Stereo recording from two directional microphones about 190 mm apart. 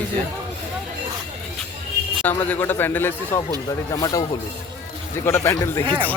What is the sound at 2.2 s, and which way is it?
A man's voice, 10° left (ahead or behind).